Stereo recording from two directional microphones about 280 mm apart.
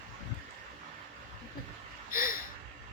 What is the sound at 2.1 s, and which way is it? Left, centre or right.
Gasp, left.